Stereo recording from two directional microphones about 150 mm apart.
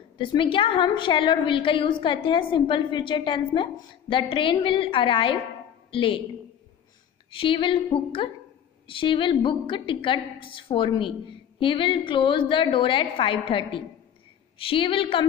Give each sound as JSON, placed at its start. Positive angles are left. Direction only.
{"t": 0.2, "sound": "a woman's voice", "side_deg": 35}
{"t": 7.3, "sound": "a woman's voice", "side_deg": 35}